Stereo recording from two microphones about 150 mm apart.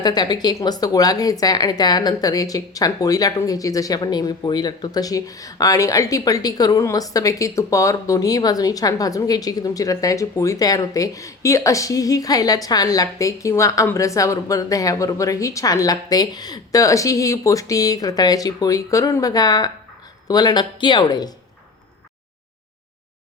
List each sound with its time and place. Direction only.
0.0 s speech: 25° left (ahead or behind)